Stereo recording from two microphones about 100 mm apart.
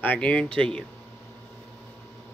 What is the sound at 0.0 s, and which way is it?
Speech, 15° left (ahead or behind).